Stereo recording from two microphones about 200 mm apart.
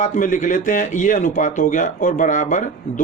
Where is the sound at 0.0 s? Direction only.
40° left (ahead or behind).